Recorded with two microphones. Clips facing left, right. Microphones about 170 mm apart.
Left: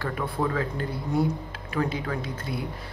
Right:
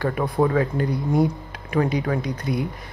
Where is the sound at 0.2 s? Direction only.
35° right (ahead or behind).